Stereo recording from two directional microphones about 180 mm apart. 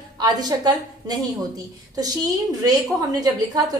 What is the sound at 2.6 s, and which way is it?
A woman's voice, 20° right (ahead or behind).